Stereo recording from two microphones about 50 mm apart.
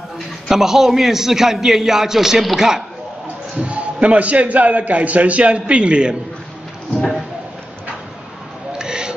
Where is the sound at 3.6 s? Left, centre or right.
Right.